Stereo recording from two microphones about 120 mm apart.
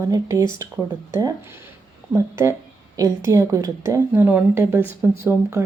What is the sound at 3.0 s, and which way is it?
Speech, 25° right (ahead or behind).